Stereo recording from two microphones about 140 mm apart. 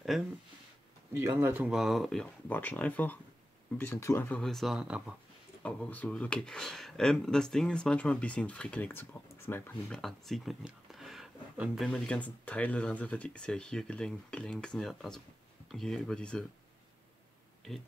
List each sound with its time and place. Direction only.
0.1 s speech: centre (ahead or behind)
1.1 s speech: 20° right (ahead or behind)
1.7 s speech: centre (ahead or behind); by 4.4 s 15° left (ahead or behind)
4.4 s speech: centre (ahead or behind)
5.6 s speech: 10° left (ahead or behind)
11.9 s speech: 10° left (ahead or behind)